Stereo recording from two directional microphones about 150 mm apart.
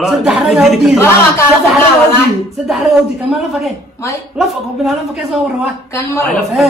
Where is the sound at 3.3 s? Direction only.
Centre (ahead or behind).